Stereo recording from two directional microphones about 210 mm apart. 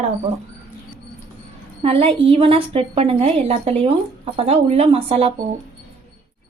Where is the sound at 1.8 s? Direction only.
25° right (ahead or behind).